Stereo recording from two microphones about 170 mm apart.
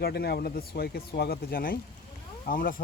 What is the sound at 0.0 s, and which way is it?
Speech, 65° left (ahead or behind).